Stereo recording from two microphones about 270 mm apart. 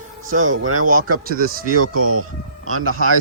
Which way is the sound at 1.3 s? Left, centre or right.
Right.